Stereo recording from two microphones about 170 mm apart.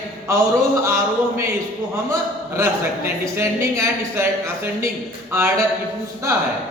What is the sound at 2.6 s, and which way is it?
A man's voice, 15° right (ahead or behind).